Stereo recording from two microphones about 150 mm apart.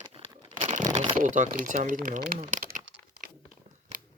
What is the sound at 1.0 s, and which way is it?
Speech, 55° right (ahead or behind).